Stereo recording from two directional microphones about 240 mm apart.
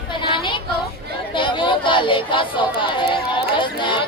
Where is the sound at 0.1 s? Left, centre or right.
Centre.